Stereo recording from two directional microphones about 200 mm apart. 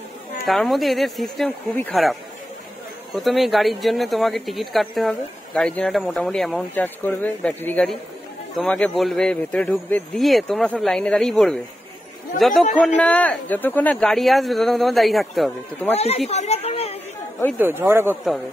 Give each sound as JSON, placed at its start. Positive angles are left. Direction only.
{"t": 0.5, "sound": "speech", "side_deg": 0}
{"t": 15.9, "sound": "speech", "side_deg": 30}
{"t": 17.6, "sound": "speech", "side_deg": -10}